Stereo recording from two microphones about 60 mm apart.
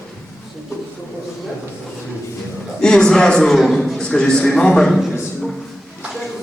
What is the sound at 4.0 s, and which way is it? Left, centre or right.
Speech, centre.